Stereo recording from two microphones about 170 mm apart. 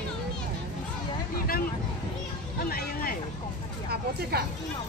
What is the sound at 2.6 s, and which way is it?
Speech, 60° left (ahead or behind).